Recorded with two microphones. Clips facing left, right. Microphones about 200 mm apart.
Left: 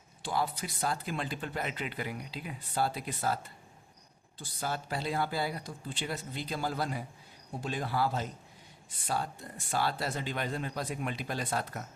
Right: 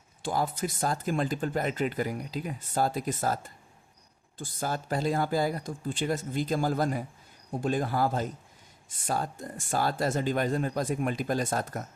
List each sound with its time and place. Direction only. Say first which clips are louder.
0.2 s speech: right 4 dB; 45° right (ahead or behind)